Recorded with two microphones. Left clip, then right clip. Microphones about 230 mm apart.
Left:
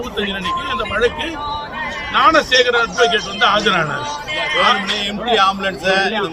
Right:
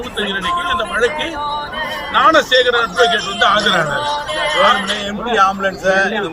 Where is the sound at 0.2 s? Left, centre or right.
Centre.